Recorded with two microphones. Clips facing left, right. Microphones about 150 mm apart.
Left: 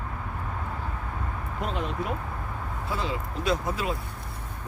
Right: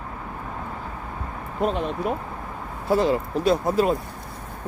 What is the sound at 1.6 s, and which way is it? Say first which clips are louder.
Speech: right 7 dB; 45° right (ahead or behind).